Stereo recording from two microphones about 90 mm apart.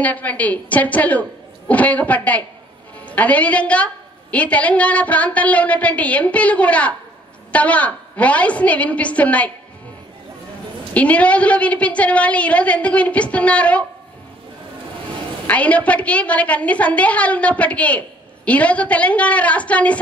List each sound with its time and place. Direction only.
0.0 s a woman's voice: 15° left (ahead or behind)
10.9 s a woman's voice: 15° left (ahead or behind)
15.4 s a woman's voice: 15° left (ahead or behind)